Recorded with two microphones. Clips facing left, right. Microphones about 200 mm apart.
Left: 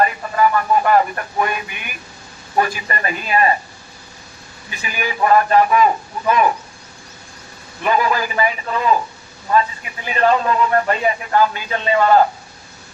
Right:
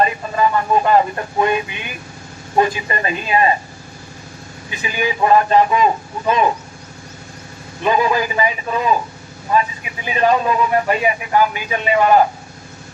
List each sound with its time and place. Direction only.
0.0 s speech: 20° right (ahead or behind)
4.7 s speech: 20° right (ahead or behind)
7.9 s a man's voice: 20° right (ahead or behind)